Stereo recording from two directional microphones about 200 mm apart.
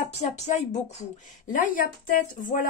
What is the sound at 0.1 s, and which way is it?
Speech, 35° left (ahead or behind).